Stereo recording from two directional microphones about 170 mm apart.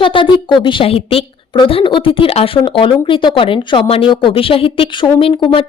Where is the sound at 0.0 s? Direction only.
30° left (ahead or behind).